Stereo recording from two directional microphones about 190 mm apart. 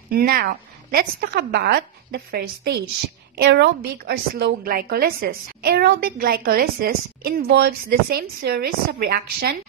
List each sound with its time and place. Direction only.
0.1 s a woman's voice: 50° right (ahead or behind)